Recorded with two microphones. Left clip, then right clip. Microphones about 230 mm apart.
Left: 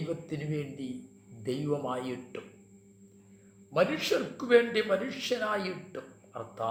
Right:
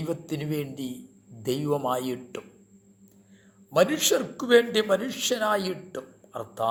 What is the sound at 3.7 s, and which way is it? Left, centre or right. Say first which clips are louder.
A man's voice: right 5 dB; right.